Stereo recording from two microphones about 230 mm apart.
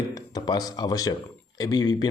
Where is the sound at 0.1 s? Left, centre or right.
Centre.